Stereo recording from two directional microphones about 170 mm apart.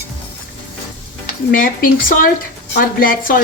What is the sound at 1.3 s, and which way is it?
Speech, 55° left (ahead or behind).